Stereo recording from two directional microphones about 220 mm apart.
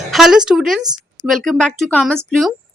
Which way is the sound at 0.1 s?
Centre (ahead or behind).